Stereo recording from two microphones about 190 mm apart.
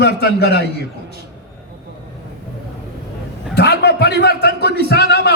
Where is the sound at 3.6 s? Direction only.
60° left (ahead or behind).